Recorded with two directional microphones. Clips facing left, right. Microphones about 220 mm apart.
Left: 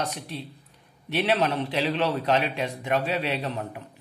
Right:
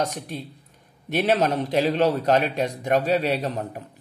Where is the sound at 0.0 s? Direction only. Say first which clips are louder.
Right 4 dB; 45° right (ahead or behind).